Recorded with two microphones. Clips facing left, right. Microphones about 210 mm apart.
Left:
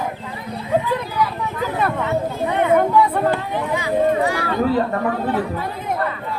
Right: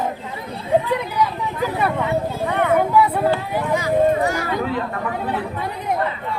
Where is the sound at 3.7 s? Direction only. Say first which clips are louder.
Right 1 dB; 45° right (ahead or behind).